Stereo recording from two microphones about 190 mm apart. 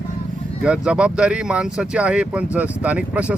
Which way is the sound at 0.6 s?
5° right (ahead or behind).